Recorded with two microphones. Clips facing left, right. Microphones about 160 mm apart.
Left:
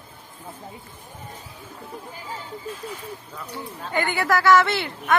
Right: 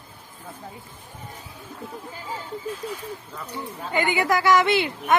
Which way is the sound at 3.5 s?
15° right (ahead or behind).